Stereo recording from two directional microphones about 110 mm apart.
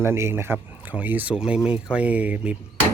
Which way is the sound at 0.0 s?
20° right (ahead or behind).